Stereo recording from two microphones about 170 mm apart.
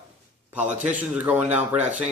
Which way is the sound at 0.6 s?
45° right (ahead or behind).